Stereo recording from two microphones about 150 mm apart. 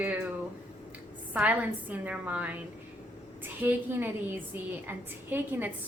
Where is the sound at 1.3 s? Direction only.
10° right (ahead or behind).